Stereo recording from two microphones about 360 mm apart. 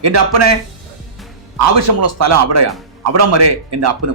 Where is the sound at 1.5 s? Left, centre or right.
Right.